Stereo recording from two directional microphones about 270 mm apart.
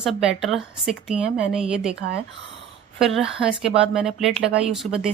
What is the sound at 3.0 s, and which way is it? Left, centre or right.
Speech, centre.